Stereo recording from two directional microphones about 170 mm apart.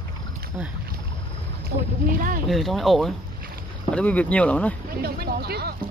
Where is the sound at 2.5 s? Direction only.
Centre (ahead or behind).